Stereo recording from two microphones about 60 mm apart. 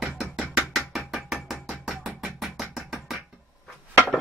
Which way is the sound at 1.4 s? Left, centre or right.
Centre.